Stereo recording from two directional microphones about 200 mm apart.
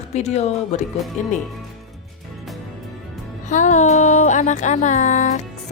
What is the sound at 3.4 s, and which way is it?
Music, 35° left (ahead or behind).